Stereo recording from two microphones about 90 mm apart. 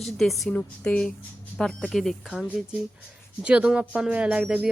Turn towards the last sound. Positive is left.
turn(degrees=-15)  # may be behind; listen again after turning